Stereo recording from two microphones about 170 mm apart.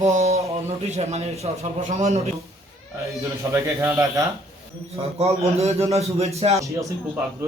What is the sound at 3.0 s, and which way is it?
Speech, 15° right (ahead or behind).